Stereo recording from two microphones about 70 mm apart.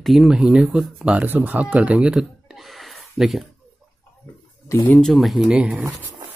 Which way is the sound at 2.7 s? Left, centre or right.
Centre.